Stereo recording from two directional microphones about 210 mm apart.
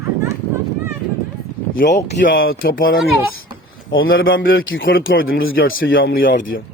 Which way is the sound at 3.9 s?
70° left (ahead or behind).